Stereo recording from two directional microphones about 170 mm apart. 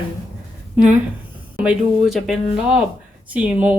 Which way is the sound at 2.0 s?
Centre (ahead or behind).